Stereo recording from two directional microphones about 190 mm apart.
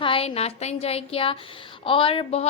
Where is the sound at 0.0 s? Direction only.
30° left (ahead or behind).